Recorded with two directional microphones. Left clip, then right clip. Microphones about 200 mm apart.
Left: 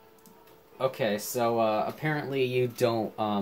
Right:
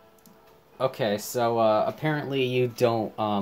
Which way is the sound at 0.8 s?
30° right (ahead or behind).